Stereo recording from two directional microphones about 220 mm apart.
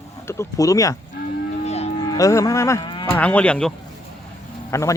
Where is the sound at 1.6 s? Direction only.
30° left (ahead or behind).